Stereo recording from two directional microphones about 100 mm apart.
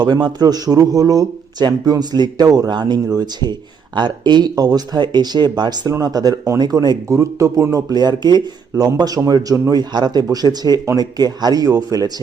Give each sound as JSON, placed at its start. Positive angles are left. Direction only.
{"t": 0.0, "sound": "speech", "side_deg": -45}
{"t": 8.7, "sound": "a man's voice", "side_deg": -30}